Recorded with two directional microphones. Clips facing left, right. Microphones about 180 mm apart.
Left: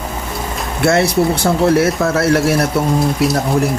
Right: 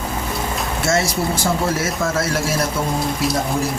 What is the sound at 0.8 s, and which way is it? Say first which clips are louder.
Speech: left 8 dB; 60° left (ahead or behind).